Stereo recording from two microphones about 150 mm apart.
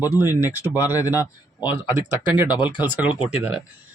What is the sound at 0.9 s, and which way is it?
Speech, 20° left (ahead or behind).